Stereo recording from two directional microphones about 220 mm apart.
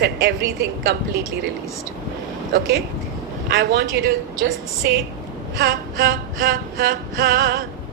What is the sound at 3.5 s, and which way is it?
A woman's voice, 45° right (ahead or behind).